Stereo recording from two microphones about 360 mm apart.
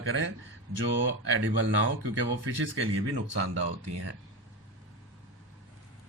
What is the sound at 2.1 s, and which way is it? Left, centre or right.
Speech, right.